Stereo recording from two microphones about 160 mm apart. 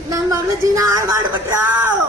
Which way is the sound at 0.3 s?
20° right (ahead or behind).